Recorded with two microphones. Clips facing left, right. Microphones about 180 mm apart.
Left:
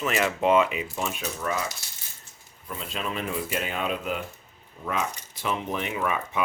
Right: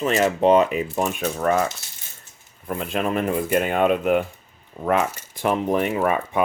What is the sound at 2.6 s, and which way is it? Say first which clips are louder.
Speech: right 9 dB; 55° right (ahead or behind).